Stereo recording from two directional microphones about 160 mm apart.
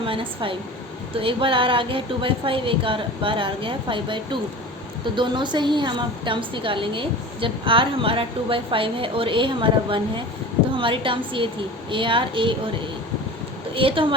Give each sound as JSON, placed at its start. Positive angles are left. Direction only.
{"t": 0.0, "sound": "a woman's voice", "side_deg": -35}
{"t": 13.7, "sound": "a woman's voice", "side_deg": -35}